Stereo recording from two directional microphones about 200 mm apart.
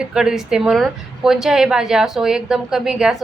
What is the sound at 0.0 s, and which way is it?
A woman's voice, 5° right (ahead or behind).